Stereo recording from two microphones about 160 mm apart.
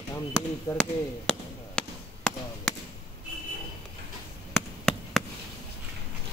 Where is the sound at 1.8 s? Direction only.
5° left (ahead or behind).